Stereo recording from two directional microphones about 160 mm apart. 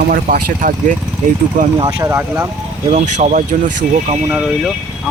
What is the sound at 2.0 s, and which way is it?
Speech, 15° right (ahead or behind).